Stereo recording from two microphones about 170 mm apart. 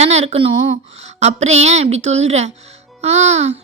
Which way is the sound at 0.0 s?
40° right (ahead or behind).